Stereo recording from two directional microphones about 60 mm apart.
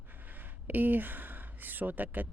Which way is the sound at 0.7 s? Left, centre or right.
Right.